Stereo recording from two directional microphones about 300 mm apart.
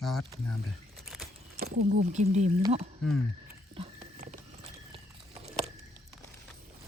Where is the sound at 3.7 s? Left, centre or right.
Centre.